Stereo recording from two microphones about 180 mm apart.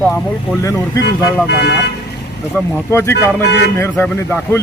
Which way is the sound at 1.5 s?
65° left (ahead or behind).